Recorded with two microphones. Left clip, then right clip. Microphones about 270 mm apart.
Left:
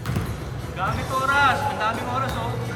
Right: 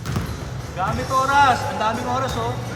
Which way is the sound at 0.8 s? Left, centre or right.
Centre.